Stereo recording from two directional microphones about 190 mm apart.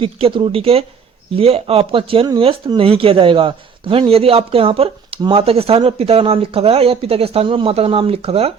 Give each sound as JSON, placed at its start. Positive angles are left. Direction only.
{"t": 0.0, "sound": "speech", "side_deg": -25}